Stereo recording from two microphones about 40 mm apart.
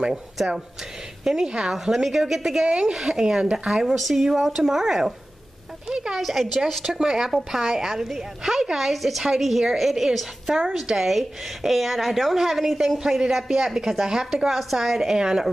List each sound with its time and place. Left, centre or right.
0.4 s a woman's voice: centre
6.2 s a woman's voice: centre
14.5 s a woman's voice: centre